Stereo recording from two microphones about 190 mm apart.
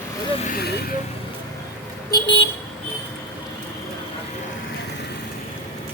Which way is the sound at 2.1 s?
25° left (ahead or behind).